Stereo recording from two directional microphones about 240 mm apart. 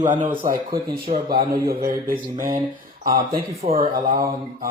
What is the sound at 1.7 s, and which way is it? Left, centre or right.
Speech, right.